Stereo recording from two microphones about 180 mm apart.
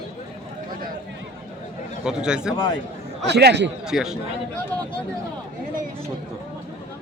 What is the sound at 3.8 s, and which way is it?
Speech, centre (ahead or behind).